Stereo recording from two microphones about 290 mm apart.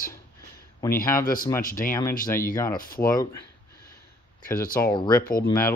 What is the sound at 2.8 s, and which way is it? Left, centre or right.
Speech, left.